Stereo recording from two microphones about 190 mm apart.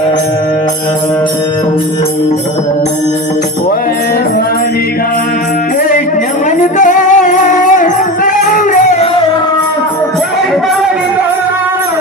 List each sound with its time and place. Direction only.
6.6 s music: 40° left (ahead or behind)